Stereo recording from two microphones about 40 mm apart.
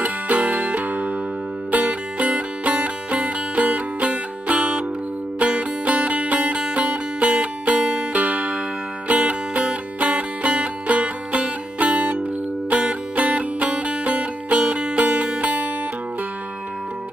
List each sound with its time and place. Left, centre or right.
0.0 s music: right
1.8 s music: right